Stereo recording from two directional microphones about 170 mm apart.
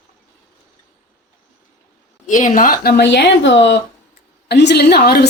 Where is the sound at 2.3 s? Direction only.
50° left (ahead or behind); by 3.8 s 90° left.